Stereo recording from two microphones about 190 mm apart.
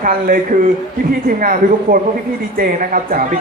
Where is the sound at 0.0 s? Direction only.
45° right (ahead or behind).